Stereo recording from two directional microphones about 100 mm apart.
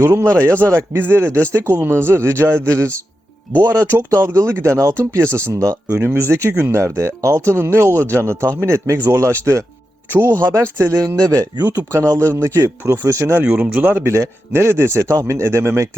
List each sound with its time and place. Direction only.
0.0 s speech: 30° right (ahead or behind)
5.9 s speech: 15° right (ahead or behind)
6.1 s speech: 25° right (ahead or behind)
11.8 s speech: 25° right (ahead or behind)
13.4 s speech: 15° right (ahead or behind)